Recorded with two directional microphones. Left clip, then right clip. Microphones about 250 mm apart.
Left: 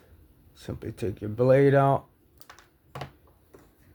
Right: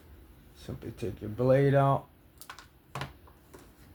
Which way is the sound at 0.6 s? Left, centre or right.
Left.